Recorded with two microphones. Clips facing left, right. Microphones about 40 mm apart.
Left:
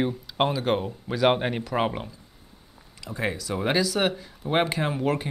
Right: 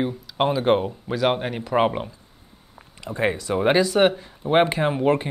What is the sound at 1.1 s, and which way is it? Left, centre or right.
Speech, centre.